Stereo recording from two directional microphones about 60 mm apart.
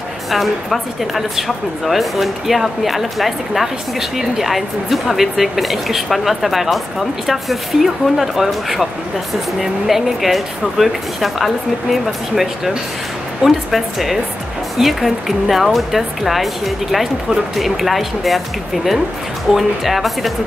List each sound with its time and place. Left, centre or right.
0.3 s speech: centre
19.5 s speech: centre